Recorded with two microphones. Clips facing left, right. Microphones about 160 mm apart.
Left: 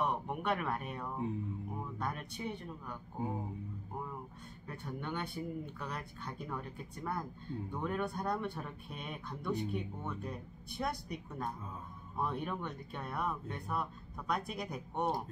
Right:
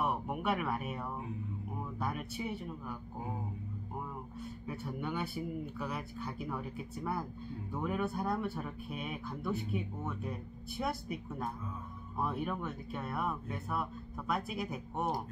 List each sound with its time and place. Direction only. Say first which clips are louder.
0.0 s a sound: right 1 dB; 5° right (ahead or behind)
2.0 s speech: right 5 dB; 5° right (ahead or behind)
4.6 s speech: right 2 dB; 5° right (ahead or behind)